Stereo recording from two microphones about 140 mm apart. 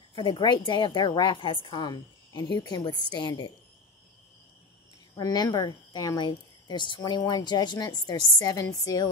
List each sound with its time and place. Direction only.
0.1 s a woman's voice: 35° left (ahead or behind)
5.1 s speech: 30° left (ahead or behind)